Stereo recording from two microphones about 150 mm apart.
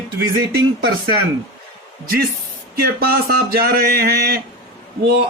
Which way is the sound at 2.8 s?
90° right.